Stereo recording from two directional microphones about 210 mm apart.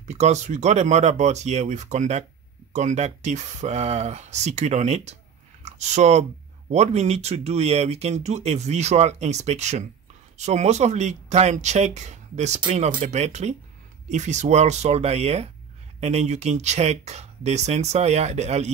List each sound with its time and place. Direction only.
0.0 s speech: 35° right (ahead or behind)